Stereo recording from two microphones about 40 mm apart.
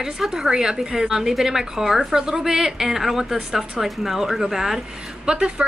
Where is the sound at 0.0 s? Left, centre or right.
Centre.